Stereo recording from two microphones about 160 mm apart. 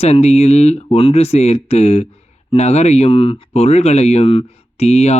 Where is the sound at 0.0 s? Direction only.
40° left (ahead or behind).